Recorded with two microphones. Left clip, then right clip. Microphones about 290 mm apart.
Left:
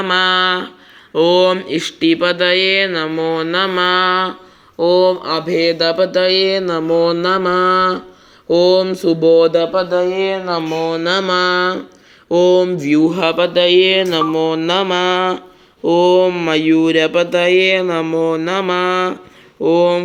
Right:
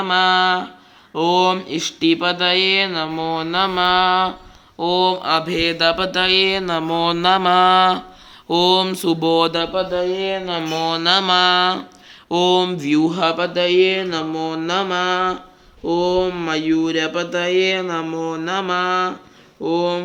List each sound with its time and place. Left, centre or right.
0.0 s speech: centre